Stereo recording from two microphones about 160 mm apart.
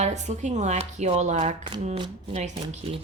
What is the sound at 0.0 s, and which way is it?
A woman's voice, 45° right (ahead or behind).